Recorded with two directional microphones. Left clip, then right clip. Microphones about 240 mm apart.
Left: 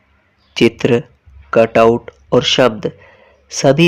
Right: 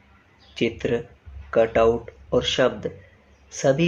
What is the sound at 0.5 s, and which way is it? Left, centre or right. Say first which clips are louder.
Speech: left 11 dB; left.